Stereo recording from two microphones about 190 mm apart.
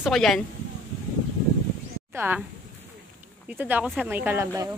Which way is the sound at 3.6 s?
10° right (ahead or behind).